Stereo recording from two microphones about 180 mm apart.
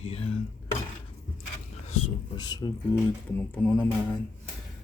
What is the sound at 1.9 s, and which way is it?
Speech, 25° left (ahead or behind).